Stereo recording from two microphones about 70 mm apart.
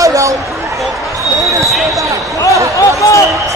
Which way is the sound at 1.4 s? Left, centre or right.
Right.